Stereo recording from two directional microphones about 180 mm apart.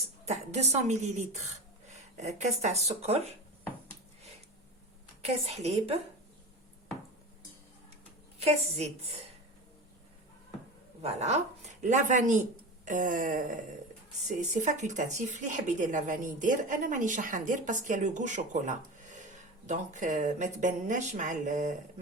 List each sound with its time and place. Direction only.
0.3 s a woman's voice: 40° right (ahead or behind)
5.2 s a woman's voice: 35° right (ahead or behind)
8.4 s a woman's voice: 35° right (ahead or behind)
11.0 s a woman's voice: 35° right (ahead or behind)